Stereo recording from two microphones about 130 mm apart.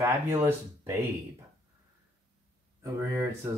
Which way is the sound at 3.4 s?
15° right (ahead or behind).